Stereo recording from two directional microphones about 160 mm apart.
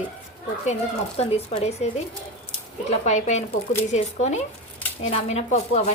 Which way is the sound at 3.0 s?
50° left (ahead or behind).